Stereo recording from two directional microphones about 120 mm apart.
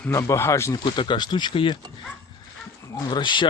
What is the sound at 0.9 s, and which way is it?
Speech, 40° left (ahead or behind).